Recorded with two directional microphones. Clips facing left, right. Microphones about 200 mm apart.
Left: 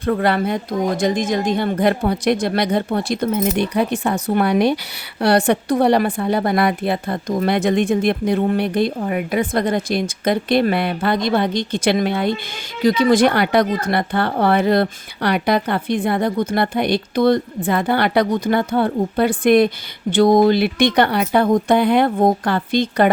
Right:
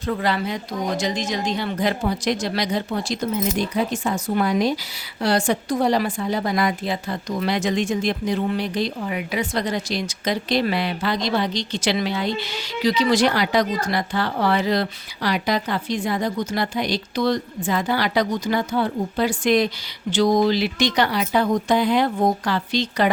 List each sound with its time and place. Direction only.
0.0 s speech: 60° left (ahead or behind)